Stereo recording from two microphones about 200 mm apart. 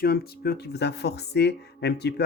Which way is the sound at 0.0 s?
50° left (ahead or behind).